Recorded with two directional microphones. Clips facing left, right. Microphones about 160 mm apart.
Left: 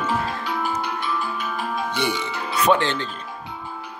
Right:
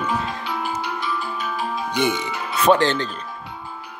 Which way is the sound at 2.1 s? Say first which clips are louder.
Even; 40° right (ahead or behind).